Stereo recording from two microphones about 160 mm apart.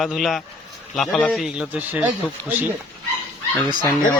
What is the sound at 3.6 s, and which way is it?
Speech, 25° right (ahead or behind).